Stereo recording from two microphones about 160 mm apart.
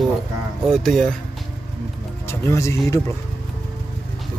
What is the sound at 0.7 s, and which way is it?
Speech, 5° left (ahead or behind).